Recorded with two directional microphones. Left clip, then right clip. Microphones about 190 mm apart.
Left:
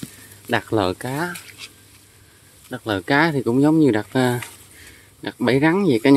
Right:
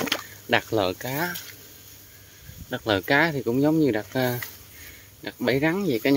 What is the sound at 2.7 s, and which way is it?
Speech, 15° left (ahead or behind).